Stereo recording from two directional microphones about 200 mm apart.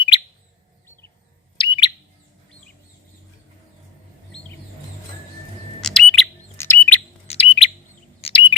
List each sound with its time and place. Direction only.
1.5 s bird: 25° left (ahead or behind)
5.8 s bird: 5° left (ahead or behind)
7.3 s bird: 30° left (ahead or behind)